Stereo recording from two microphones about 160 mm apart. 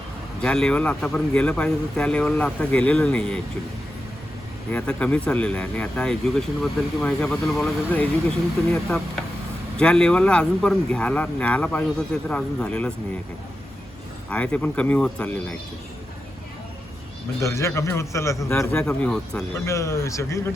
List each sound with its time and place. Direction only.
0.4 s speech: 5° left (ahead or behind)
4.7 s speech: 10° left (ahead or behind)
9.7 s speech: 5° left (ahead or behind)
14.3 s speech: 10° left (ahead or behind)
17.4 s speech: 20° left (ahead or behind)
18.9 s speech: 5° left (ahead or behind)
19.4 s speech: 15° left (ahead or behind)